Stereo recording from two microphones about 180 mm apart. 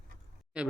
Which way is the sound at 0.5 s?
5° right (ahead or behind).